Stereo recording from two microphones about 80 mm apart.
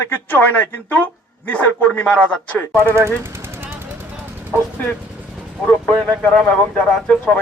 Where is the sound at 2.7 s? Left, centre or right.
Right.